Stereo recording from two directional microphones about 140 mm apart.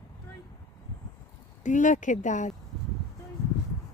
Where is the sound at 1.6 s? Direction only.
65° left (ahead or behind).